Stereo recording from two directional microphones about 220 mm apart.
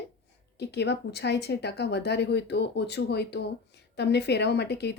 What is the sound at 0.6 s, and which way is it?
Speech, 50° left (ahead or behind).